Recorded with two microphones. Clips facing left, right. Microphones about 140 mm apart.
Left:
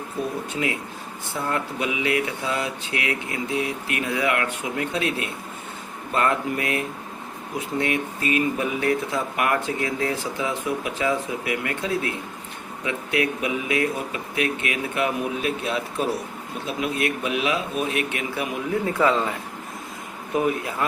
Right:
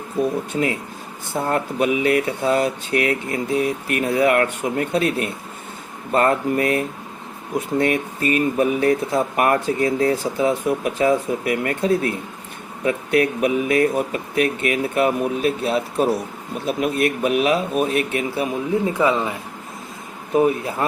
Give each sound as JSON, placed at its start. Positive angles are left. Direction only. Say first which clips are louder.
{"t": 1.5, "sound": "speech", "louder": "right 7 dB", "side_deg": -45}
{"t": 18.9, "sound": "speech", "louder": "left 1 dB", "side_deg": -15}
{"t": 20.3, "sound": "speech", "louder": "right 5 dB", "side_deg": -30}